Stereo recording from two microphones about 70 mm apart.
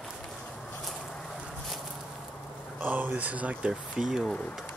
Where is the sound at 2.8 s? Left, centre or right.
Right.